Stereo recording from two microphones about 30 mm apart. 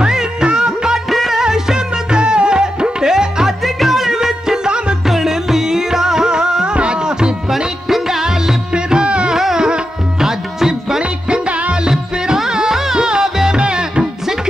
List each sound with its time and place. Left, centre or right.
0.0 s music of bollywood: right
1.0 s music of bollywood: centre
1.4 s music: right
3.6 s music: centre
4.6 s music: right
5.0 s music: centre
7.4 s music: centre
8.7 s music: right
9.3 s music: centre
11.0 s music: right
11.9 s music: right